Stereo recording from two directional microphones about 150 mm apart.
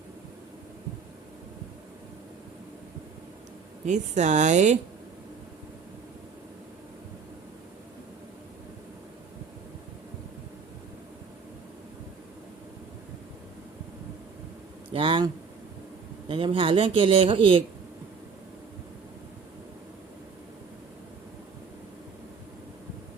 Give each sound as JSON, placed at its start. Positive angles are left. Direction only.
{"t": 3.8, "sound": "a woman's voice", "side_deg": -50}
{"t": 14.8, "sound": "a sound", "side_deg": -35}
{"t": 16.3, "sound": "speech", "side_deg": -35}